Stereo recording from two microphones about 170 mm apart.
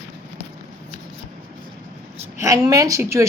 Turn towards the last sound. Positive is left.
turn(degrees=-15)  # may be behind; listen again after turning